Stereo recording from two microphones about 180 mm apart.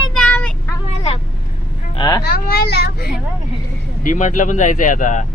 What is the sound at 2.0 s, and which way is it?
Speech, 20° left (ahead or behind).